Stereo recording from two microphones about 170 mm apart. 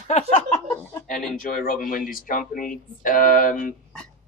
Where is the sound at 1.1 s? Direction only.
55° left (ahead or behind).